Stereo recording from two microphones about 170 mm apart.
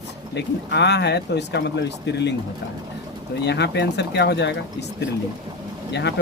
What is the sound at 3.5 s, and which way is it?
Speech, 90° left.